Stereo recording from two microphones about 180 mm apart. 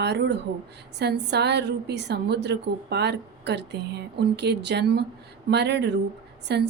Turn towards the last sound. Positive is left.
turn(degrees=-70)  # may be behind; listen again after turning